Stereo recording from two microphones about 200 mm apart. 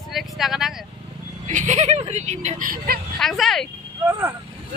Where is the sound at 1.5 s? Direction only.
40° right (ahead or behind).